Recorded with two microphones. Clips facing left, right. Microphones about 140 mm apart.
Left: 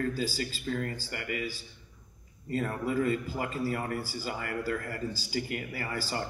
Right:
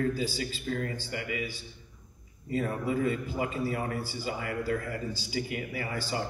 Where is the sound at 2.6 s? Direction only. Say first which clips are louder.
Even; 40° left (ahead or behind).